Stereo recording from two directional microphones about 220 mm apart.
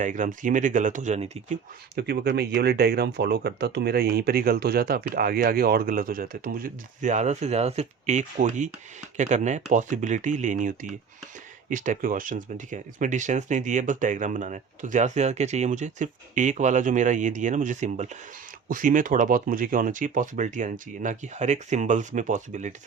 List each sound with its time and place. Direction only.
0.0 s speech: 35° right (ahead or behind)
2.0 s speech: 50° right (ahead or behind)